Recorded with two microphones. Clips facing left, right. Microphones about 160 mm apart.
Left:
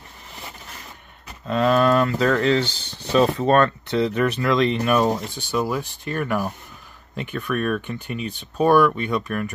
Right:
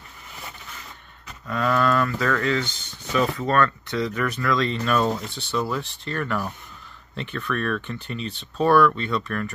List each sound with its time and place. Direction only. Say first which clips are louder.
1.5 s speech: left 4 dB; 25° left (ahead or behind)